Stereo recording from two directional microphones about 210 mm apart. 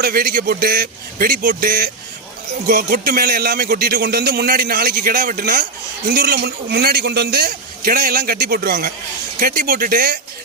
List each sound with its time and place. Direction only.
0.0 s a man's voice: 45° right (ahead or behind)